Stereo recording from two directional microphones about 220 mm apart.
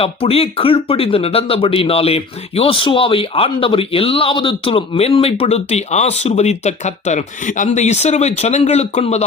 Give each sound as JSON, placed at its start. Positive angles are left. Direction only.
{"t": 0.0, "sound": "speech", "side_deg": 25}